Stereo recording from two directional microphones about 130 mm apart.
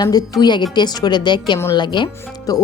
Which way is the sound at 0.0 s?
30° left (ahead or behind).